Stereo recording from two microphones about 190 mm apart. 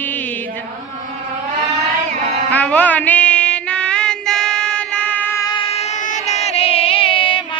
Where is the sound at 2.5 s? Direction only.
10° left (ahead or behind).